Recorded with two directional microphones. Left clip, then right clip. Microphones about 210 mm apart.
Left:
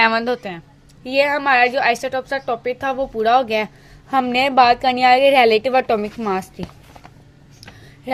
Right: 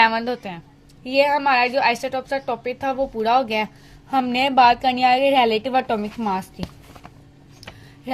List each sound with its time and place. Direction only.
0.0 s a woman's voice: 20° left (ahead or behind)